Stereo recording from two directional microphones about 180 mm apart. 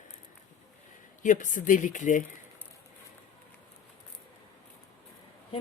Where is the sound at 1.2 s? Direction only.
45° left (ahead or behind).